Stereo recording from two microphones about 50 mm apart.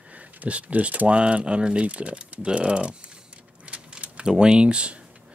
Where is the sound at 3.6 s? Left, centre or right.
Right.